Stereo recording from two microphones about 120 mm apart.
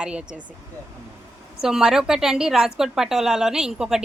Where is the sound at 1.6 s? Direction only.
5° right (ahead or behind).